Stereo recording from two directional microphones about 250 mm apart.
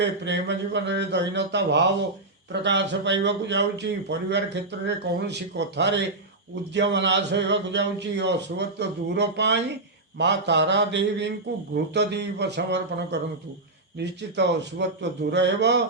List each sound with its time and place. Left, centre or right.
0.0 s speech: right